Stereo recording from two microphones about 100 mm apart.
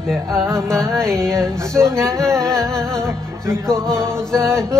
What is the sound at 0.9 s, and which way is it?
Music, 5° left (ahead or behind).